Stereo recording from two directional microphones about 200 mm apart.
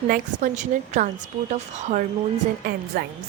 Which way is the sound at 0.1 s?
40° right (ahead or behind).